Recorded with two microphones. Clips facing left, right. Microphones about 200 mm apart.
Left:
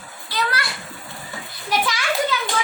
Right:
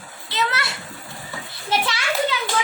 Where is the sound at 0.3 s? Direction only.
25° right (ahead or behind).